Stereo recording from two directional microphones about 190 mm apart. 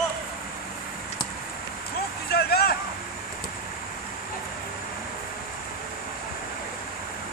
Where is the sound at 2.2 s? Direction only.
55° left (ahead or behind).